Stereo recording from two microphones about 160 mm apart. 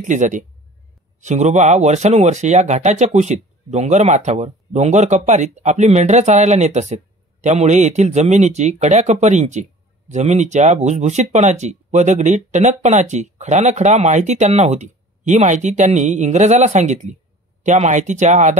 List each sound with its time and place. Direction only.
0.0 s speech: 50° right (ahead or behind)